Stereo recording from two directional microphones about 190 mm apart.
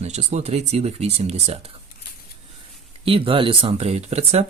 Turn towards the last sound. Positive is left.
turn(degrees=-35)  # may be behind; listen again after turning